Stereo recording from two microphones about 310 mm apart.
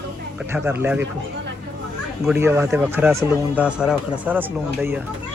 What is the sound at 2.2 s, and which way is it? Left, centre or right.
Speech, centre.